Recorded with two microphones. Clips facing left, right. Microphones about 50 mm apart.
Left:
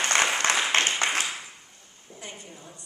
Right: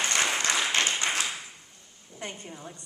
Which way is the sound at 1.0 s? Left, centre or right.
Left.